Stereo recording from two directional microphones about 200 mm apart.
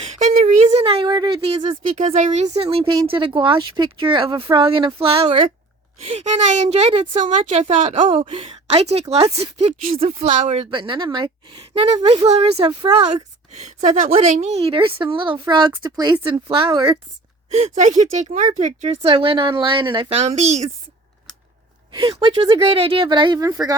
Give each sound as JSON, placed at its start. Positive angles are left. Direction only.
{"t": 0.0, "sound": "a sound", "side_deg": -35}
{"t": 2.6, "sound": "a woman's voice", "side_deg": -30}
{"t": 13.5, "sound": "a woman's voice", "side_deg": -35}
{"t": 17.5, "sound": "a woman's voice", "side_deg": -35}
{"t": 21.9, "sound": "a woman's voice", "side_deg": -25}